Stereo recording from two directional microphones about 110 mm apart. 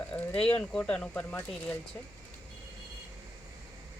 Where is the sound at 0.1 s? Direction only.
10° left (ahead or behind).